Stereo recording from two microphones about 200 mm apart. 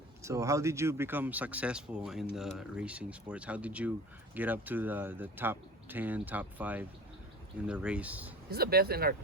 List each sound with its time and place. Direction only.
0.2 s speech: 15° right (ahead or behind)
8.4 s speech: 50° right (ahead or behind)